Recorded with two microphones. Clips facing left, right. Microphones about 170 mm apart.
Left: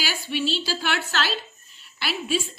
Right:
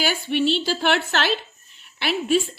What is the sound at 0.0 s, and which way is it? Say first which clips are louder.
A woman's voice: right 6 dB; 55° right (ahead or behind).